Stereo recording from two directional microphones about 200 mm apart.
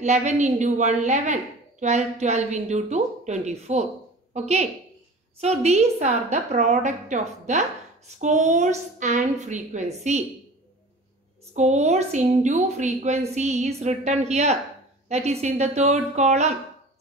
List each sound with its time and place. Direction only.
0.0 s a woman's voice: 35° right (ahead or behind)
11.5 s a woman's voice: 35° right (ahead or behind)